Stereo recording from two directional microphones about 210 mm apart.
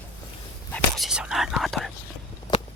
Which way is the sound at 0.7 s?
Centre (ahead or behind).